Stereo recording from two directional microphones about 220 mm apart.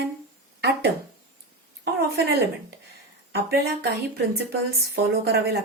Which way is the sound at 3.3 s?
45° right (ahead or behind).